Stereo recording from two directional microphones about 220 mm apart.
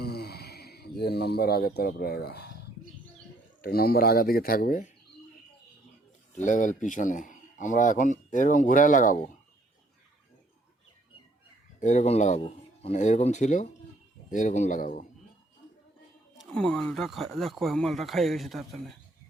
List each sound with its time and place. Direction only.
0.0 s speech: 45° left (ahead or behind)
3.6 s speech: 45° left (ahead or behind)
6.3 s a man's voice: 35° left (ahead or behind)
11.8 s a man's voice: 35° left (ahead or behind)
16.4 s speech: 5° left (ahead or behind)